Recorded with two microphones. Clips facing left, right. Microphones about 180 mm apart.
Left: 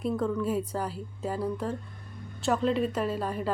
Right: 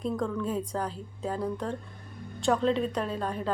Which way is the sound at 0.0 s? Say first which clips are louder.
Left 2 dB; 5° left (ahead or behind).